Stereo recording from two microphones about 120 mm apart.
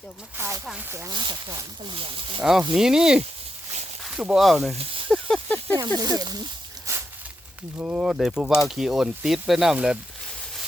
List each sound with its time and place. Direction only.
0.3 s speech: 20° right (ahead or behind)
0.6 s speech: 5° right (ahead or behind)
0.9 s speech: 20° right (ahead or behind)
1.1 s speech: 40° right (ahead or behind)
2.4 s speech: 5° right (ahead or behind)
4.7 s speech: 55° right (ahead or behind)
5.0 s snake: 5° left (ahead or behind)
5.7 s speech: 35° right (ahead or behind)
6.9 s a sound: 25° right (ahead or behind)
7.8 s speech: 10° right (ahead or behind)